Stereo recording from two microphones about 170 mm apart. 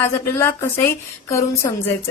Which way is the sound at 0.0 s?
15° left (ahead or behind).